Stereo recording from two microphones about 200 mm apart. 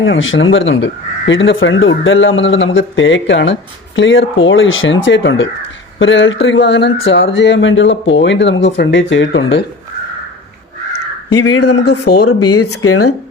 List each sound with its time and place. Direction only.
0.0 s speech: 75° left (ahead or behind)
11.3 s speech: 90° left; by 12.3 s 55° left (ahead or behind)
12.3 s speech: 90° left